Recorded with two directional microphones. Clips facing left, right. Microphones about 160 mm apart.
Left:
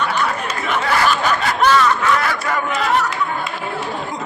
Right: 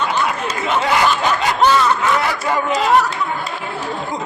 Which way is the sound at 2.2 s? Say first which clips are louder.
Right 2 dB; 25° right (ahead or behind).